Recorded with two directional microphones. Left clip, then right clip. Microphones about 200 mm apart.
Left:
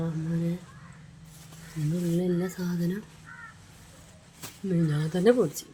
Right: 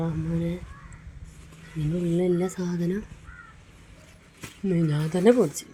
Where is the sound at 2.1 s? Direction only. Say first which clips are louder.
Right 6 dB; 15° right (ahead or behind).